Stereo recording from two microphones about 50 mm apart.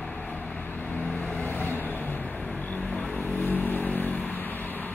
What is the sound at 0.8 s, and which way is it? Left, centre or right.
Vehicle, left.